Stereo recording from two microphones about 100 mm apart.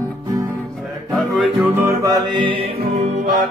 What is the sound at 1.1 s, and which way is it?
Music, centre (ahead or behind).